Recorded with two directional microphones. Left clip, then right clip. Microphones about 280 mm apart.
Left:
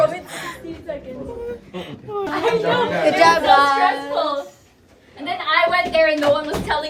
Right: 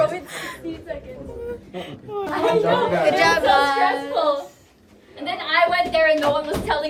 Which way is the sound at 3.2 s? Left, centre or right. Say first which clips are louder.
Left 6 dB; centre.